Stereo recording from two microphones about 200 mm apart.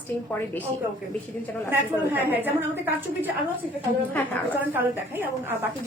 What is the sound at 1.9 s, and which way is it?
Speech, 10° right (ahead or behind).